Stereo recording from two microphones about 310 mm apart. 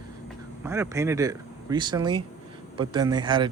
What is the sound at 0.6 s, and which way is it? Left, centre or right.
Speech, centre.